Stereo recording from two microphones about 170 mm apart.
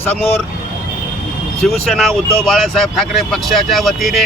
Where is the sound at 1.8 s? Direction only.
5° left (ahead or behind).